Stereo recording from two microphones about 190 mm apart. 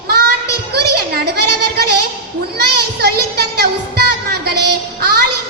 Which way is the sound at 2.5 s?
55° right (ahead or behind).